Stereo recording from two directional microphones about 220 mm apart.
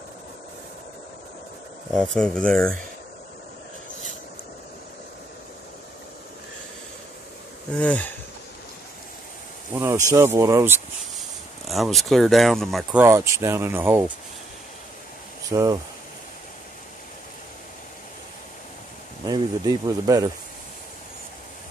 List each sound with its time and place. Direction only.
2.0 s speech: 5° left (ahead or behind)
7.7 s speech: 5° left (ahead or behind)
9.8 s speech: 15° right (ahead or behind)
13.0 s speech: 15° right (ahead or behind)
15.5 s speech: 15° right (ahead or behind)
19.2 s speech: 20° right (ahead or behind)